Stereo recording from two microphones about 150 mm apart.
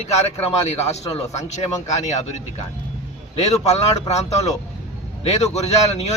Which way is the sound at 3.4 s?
45° left (ahead or behind).